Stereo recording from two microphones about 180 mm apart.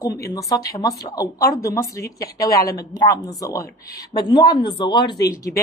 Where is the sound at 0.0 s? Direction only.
20° left (ahead or behind).